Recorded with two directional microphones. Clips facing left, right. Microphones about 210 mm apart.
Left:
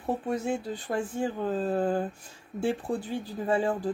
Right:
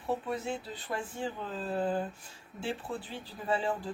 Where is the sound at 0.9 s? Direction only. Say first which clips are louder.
Left 6 dB; 45° left (ahead or behind).